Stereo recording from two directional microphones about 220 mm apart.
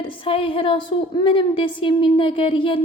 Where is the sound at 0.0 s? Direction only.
25° left (ahead or behind).